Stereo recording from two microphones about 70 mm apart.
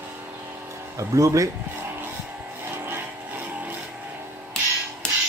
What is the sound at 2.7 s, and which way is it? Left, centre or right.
Vehicle, right.